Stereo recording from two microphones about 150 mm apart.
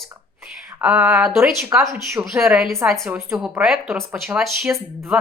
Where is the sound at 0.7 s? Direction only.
10° right (ahead or behind).